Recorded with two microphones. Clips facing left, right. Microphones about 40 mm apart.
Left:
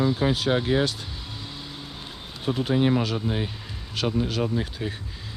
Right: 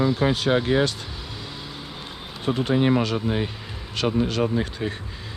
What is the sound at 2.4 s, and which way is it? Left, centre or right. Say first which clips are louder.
Speech: right 2 dB; centre.